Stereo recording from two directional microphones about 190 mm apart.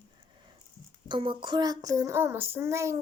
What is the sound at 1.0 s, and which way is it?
Speech, 25° right (ahead or behind).